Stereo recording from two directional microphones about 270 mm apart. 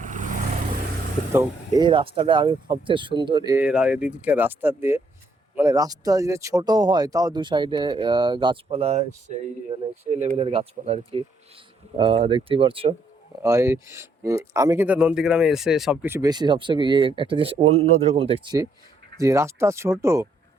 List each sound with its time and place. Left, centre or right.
0.0 s vehicle: right
1.3 s speech: centre
10.1 s speech: right